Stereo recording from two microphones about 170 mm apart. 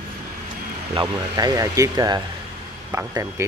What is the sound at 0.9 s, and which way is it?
Speech, 25° right (ahead or behind).